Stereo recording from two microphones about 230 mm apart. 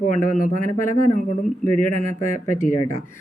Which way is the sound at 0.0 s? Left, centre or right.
Left.